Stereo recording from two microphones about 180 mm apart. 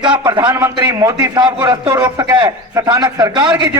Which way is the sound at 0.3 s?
20° right (ahead or behind).